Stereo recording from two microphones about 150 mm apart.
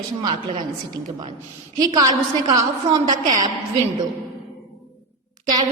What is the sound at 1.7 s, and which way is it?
A woman's voice, 25° right (ahead or behind).